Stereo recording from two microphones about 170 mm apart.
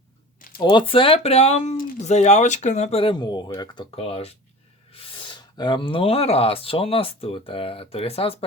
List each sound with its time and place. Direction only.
0.6 s speech: 30° left (ahead or behind)